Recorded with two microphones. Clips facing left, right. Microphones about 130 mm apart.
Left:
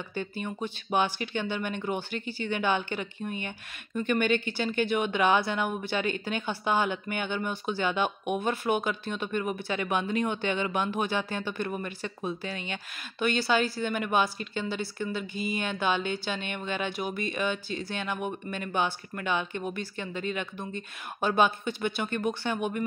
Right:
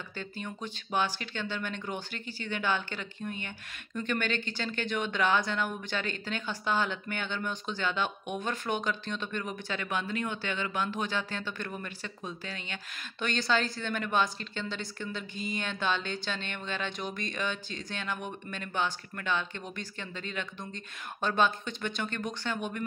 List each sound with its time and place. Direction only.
0.1 s speech: 15° left (ahead or behind)